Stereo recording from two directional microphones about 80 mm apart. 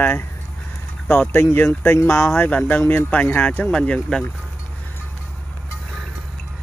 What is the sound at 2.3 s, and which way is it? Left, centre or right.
Speech, centre.